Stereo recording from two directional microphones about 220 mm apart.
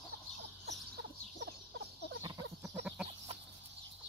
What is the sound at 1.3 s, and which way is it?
Fowl, 50° right (ahead or behind).